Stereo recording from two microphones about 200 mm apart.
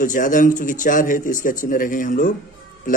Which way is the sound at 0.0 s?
40° left (ahead or behind).